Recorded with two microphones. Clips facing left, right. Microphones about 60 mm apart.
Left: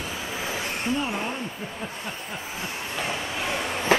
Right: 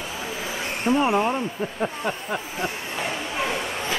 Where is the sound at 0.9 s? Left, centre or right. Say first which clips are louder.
Right 11 dB; right.